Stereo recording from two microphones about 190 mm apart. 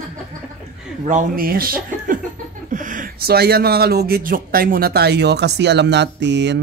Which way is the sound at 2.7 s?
45° right (ahead or behind).